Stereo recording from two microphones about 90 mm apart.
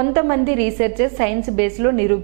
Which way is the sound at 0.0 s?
20° right (ahead or behind).